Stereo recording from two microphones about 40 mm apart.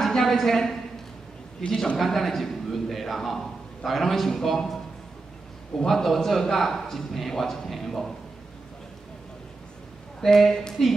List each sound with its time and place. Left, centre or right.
0.0 s a woman's voice: centre
10.2 s a man's voice: centre